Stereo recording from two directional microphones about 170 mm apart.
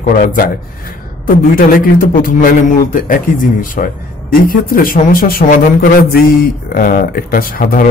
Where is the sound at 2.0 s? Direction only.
55° left (ahead or behind).